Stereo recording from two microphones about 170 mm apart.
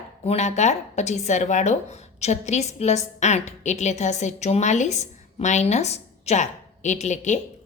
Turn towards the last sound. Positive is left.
turn(degrees=45)  # may be behind; listen again after turning